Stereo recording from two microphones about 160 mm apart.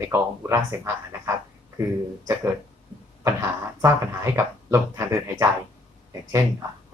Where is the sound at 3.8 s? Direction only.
20° right (ahead or behind).